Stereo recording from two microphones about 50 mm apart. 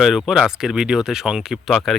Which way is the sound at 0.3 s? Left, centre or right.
Centre.